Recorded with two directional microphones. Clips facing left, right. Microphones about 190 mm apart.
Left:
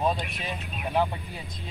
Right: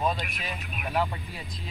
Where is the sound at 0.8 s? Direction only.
15° left (ahead or behind).